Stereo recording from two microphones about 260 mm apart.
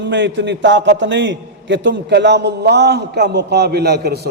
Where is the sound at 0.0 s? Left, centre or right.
Right.